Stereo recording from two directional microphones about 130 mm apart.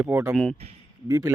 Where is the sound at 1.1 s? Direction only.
25° right (ahead or behind).